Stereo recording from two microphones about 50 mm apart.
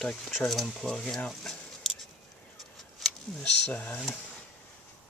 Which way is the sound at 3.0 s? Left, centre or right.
Centre.